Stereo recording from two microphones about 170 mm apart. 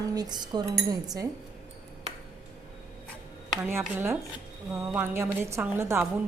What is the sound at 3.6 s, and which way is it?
A woman's voice, 15° right (ahead or behind).